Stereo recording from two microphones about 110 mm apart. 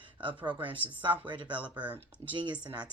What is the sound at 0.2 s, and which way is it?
Speech, 50° right (ahead or behind).